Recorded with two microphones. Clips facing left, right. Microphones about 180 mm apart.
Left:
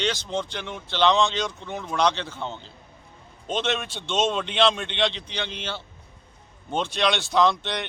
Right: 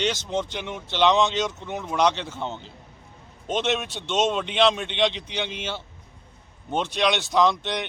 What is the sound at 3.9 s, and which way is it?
Speech, 15° right (ahead or behind).